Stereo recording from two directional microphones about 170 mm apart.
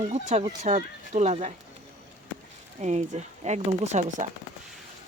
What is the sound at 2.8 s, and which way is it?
Speech, 45° right (ahead or behind).